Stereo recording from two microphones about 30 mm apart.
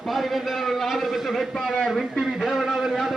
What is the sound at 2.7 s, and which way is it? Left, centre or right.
Speech, centre.